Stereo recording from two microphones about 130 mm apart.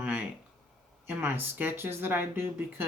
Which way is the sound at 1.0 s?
15° right (ahead or behind).